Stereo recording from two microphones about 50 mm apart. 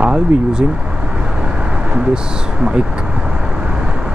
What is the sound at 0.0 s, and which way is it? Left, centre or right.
Speech, centre.